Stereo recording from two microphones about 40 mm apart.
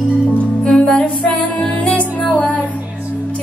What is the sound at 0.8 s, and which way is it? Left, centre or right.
Music, left.